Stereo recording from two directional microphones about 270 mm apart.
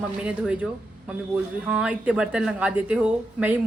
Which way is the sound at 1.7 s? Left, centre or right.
Centre.